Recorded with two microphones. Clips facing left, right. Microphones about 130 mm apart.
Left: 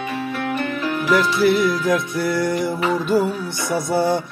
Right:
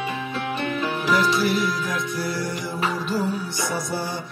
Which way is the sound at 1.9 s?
60° left (ahead or behind).